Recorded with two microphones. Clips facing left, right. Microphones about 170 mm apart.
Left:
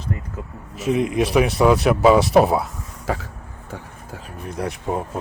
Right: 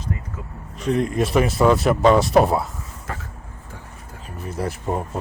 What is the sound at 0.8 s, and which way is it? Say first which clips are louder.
Speech: left 1 dB; 5° left (ahead or behind).